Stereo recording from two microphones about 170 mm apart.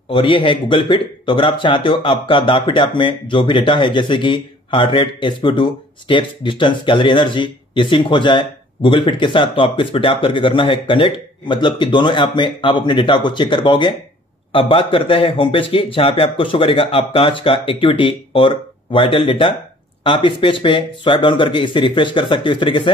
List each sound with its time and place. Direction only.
0.1 s a man's voice: 30° left (ahead or behind)